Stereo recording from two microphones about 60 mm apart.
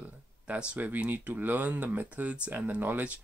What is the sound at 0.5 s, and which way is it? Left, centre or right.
Speech, centre.